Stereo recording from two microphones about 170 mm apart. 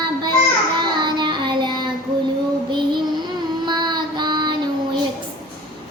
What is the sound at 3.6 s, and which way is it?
Child singing, 25° right (ahead or behind).